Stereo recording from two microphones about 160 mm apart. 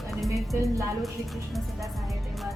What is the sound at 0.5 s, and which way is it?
Speech, 20° right (ahead or behind).